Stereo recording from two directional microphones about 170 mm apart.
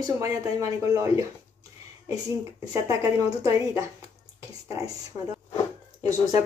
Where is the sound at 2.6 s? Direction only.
20° right (ahead or behind).